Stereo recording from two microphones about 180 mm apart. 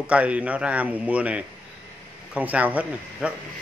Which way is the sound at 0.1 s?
5° right (ahead or behind).